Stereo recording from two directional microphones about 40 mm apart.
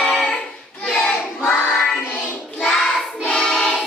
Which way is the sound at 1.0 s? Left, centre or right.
Left.